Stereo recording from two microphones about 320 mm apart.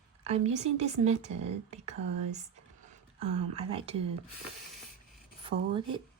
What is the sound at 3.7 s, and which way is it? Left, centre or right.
Speech, centre.